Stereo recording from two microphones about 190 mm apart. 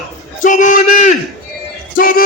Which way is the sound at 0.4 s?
40° left (ahead or behind).